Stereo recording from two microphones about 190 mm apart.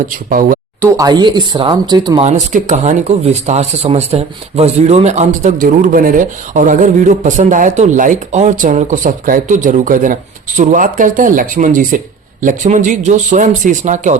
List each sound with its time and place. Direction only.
0.1 s speech: 45° right (ahead or behind)
0.8 s speech: 15° right (ahead or behind)
2.5 s speech: 40° right (ahead or behind)